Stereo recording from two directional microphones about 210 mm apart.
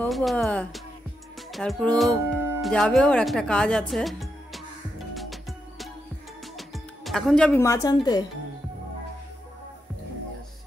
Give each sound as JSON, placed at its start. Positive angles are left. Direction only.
{"t": 0.0, "sound": "speech", "side_deg": 0}
{"t": 5.1, "sound": "music", "side_deg": 0}
{"t": 7.6, "sound": "a woman's voice", "side_deg": 15}